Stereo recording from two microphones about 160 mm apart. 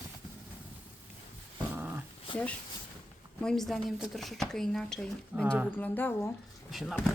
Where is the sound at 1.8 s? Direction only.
10° right (ahead or behind).